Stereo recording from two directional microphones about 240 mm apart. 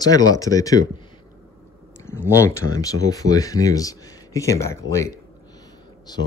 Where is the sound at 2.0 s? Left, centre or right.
Centre.